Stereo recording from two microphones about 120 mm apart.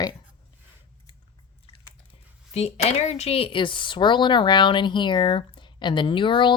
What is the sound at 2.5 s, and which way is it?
Speech, 60° left (ahead or behind).